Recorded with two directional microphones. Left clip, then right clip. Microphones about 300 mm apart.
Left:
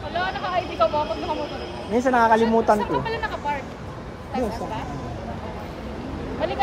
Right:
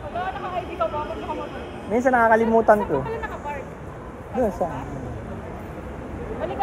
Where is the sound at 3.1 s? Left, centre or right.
Left.